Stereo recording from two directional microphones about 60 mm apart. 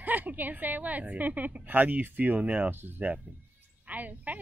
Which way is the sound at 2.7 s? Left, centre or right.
Right.